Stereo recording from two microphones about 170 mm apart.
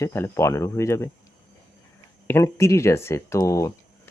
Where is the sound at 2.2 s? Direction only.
15° left (ahead or behind).